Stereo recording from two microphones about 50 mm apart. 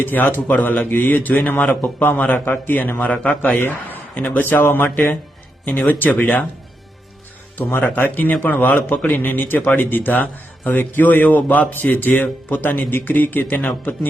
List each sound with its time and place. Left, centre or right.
0.0 s a man's voice: left
2.4 s speech: left
3.1 s a man's voice: left
3.6 s a man's voice: left
7.8 s a man's voice: left